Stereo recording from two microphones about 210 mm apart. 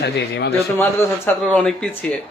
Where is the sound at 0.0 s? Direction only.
55° left (ahead or behind).